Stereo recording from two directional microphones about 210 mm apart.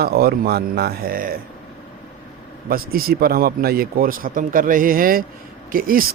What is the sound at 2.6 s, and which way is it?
Speech, 45° right (ahead or behind).